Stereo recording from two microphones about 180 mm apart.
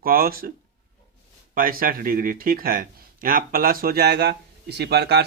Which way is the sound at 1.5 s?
50° right (ahead or behind).